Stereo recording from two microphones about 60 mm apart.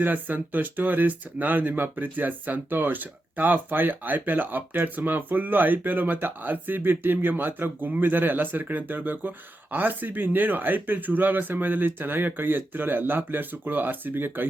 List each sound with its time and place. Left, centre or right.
0.0 s speech: right